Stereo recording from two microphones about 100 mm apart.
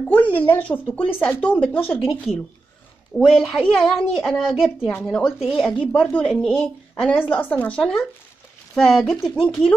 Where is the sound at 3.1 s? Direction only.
5° left (ahead or behind).